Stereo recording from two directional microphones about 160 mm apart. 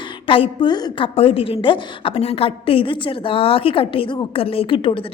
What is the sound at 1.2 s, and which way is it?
A woman's voice, 35° left (ahead or behind).